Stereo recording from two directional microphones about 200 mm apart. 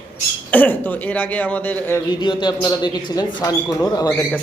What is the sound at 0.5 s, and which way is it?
Speech, 10° left (ahead or behind).